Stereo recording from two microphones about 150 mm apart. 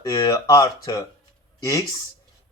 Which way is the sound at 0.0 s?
25° left (ahead or behind).